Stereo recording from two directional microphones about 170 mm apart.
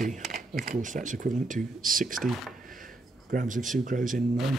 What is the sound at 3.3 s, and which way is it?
Speech, 50° right (ahead or behind).